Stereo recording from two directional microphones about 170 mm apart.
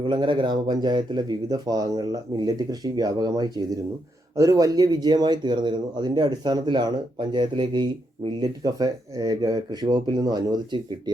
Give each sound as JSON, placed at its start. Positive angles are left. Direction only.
{"t": 0.0, "sound": "speech", "side_deg": -25}